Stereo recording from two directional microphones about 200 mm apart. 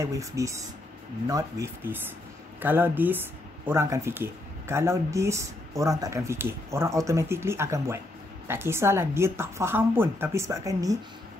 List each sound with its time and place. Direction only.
0.0 s speech: 15° right (ahead or behind)